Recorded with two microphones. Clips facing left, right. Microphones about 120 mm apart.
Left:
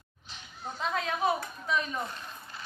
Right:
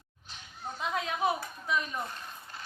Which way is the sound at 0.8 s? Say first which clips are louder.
Left 1 dB; 15° right (ahead or behind).